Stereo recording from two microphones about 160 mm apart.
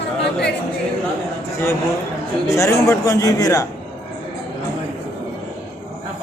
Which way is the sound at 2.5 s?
20° left (ahead or behind).